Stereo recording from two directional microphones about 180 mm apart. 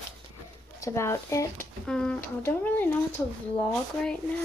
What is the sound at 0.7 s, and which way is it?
Speech, 15° left (ahead or behind).